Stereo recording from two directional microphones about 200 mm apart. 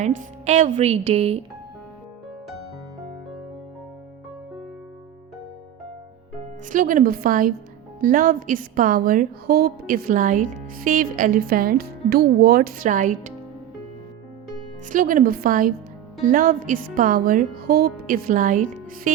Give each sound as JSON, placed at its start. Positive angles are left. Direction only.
{"t": 0.2, "sound": "speech", "side_deg": -40}
{"t": 6.7, "sound": "a woman's voice", "side_deg": -40}
{"t": 14.8, "sound": "a woman's voice", "side_deg": -40}